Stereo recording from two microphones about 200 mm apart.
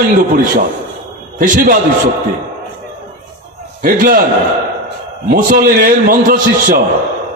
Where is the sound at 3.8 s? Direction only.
45° right (ahead or behind).